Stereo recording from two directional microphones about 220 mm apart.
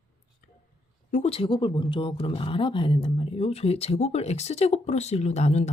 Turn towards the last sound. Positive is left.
turn(degrees=30)  # may be behind; listen again after turning